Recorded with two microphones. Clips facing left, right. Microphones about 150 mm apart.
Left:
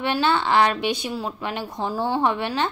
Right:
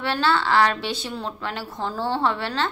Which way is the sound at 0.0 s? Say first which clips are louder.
Left 1 dB; 15° left (ahead or behind).